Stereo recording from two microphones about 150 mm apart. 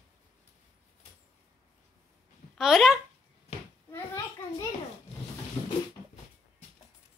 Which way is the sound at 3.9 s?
20° left (ahead or behind).